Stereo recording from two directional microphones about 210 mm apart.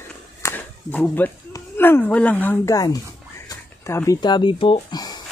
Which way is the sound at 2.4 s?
10° left (ahead or behind).